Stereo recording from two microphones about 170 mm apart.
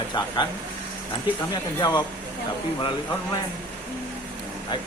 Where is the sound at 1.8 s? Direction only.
25° left (ahead or behind).